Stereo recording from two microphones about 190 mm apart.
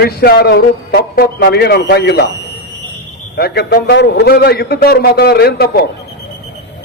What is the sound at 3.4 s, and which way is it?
A man's voice, 55° left (ahead or behind).